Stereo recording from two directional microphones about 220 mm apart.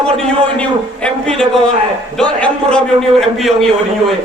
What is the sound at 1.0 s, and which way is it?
A man's voice, 5° left (ahead or behind).